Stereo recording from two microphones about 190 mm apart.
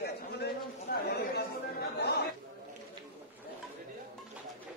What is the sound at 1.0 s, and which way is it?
Chatter, 60° left (ahead or behind).